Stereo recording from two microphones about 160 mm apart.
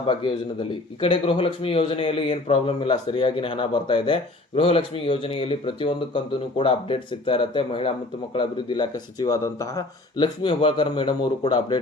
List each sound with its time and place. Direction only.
0.0 s speech: 30° left (ahead or behind)